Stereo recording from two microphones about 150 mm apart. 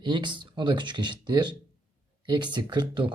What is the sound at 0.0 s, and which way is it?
Speech, 30° right (ahead or behind).